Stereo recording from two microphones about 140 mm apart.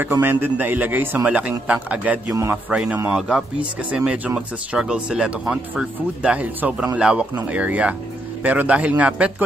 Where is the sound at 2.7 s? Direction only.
5° right (ahead or behind).